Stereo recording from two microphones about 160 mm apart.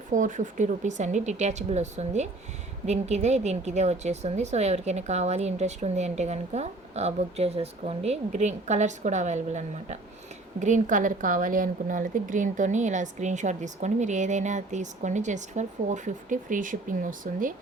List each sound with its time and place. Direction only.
0.1 s a woman's voice: 55° right (ahead or behind)